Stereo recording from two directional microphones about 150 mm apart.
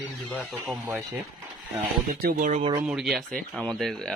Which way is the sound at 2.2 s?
60° right (ahead or behind).